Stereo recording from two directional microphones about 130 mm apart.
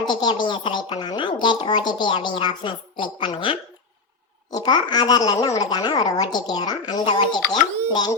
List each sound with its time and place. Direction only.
0.0 s a child's voice: 35° left (ahead or behind)